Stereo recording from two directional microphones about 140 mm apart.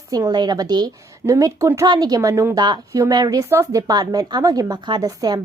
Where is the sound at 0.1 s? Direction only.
30° right (ahead or behind).